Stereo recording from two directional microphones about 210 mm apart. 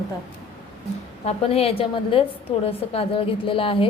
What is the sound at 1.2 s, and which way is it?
A woman's voice, 30° left (ahead or behind).